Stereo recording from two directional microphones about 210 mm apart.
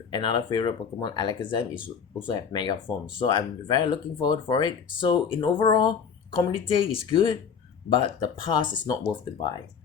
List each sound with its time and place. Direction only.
0.1 s speech: 20° left (ahead or behind)